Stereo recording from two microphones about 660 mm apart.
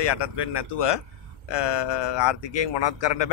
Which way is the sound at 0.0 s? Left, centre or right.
Left.